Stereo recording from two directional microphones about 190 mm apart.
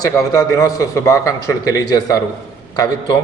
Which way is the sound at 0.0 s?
15° left (ahead or behind).